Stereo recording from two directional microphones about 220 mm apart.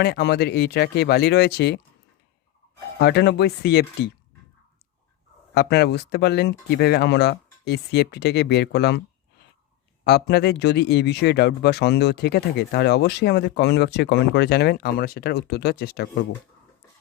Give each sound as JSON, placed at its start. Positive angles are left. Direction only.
{"t": 0.0, "sound": "speech", "side_deg": 50}
{"t": 3.0, "sound": "speech", "side_deg": 50}
{"t": 5.5, "sound": "speech", "side_deg": 50}
{"t": 10.0, "sound": "speech", "side_deg": 50}